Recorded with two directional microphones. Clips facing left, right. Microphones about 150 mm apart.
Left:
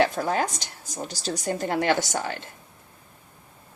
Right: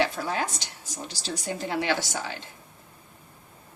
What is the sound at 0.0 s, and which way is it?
A woman's voice, 45° left (ahead or behind).